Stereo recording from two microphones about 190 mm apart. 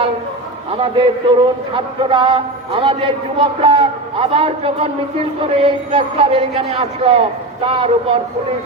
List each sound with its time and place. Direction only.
0.7 s a man's voice: 25° right (ahead or behind)